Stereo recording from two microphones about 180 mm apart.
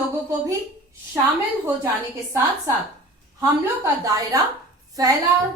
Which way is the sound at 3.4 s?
20° right (ahead or behind).